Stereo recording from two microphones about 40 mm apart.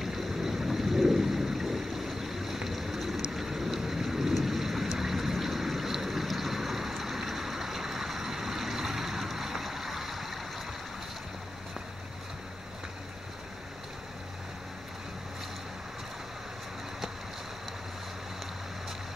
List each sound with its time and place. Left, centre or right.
0.0 s thunder: centre
4.3 s vehicle: centre